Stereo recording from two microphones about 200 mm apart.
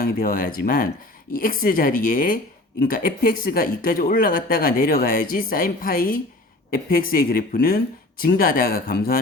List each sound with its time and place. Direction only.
0.0 s speech: 45° left (ahead or behind)